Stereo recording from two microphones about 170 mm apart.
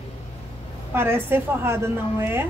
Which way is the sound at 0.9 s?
15° right (ahead or behind).